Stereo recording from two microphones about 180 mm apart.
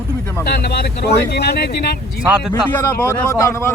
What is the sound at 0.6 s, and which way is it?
Speech, 65° left (ahead or behind).